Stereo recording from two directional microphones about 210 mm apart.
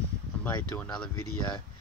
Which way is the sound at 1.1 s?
90° left.